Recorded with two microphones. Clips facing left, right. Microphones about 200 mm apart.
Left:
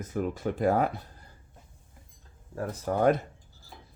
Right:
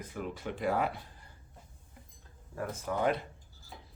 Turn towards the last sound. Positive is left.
turn(degrees=45)  # may be behind; listen again after turning